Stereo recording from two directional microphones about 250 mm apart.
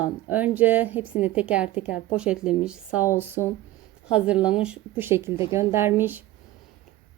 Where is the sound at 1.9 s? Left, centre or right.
Left.